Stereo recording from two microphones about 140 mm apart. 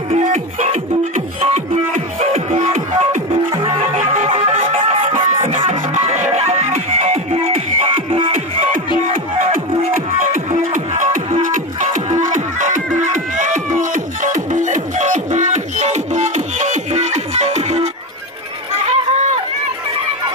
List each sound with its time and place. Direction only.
0.2 s music: 55° right (ahead or behind)
3.5 s music: 40° right (ahead or behind)
3.9 s music: 55° right (ahead or behind); by 8.6 s 40° right (ahead or behind)
9.4 s music: 55° right (ahead or behind)
18.7 s a sound: 50° right (ahead or behind)